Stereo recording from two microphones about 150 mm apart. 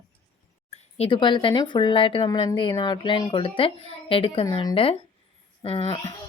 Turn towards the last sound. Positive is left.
turn(degrees=35)  # may be behind; listen again after turning